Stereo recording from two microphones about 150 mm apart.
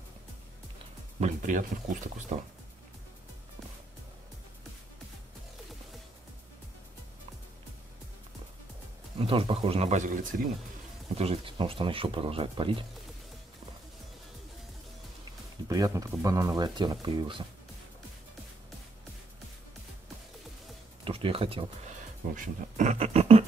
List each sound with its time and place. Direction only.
1.2 s speech: 55° right (ahead or behind)
9.2 s speech: 40° right (ahead or behind); by 10.5 s 60° right (ahead or behind)
11.1 s speech: 40° right (ahead or behind)
15.7 s speech: 25° right (ahead or behind)
21.0 s speech: 35° right (ahead or behind)
22.3 s speech: 55° right (ahead or behind)